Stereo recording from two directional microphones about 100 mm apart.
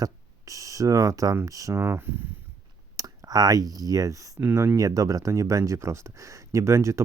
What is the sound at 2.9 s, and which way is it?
Speech, 40° right (ahead or behind).